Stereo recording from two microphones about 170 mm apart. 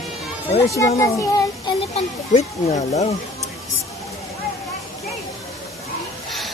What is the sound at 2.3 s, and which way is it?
Speech, 40° left (ahead or behind).